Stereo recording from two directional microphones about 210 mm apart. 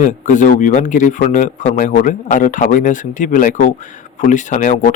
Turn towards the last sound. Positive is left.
turn(degrees=35)  # may be behind; listen again after turning